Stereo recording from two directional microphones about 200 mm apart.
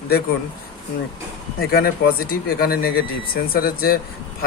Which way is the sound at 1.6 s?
50° left (ahead or behind).